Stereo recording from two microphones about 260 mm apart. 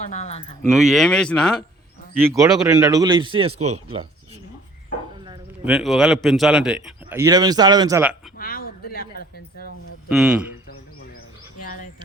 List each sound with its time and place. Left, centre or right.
0.1 s speech: left
0.7 s speech: centre
2.2 s a man's voice: centre
5.6 s speech: centre
8.4 s a sound: left
10.1 s speech: centre
11.6 s a sound: left